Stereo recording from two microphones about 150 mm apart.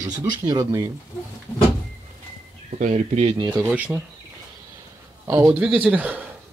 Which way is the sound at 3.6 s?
10° right (ahead or behind).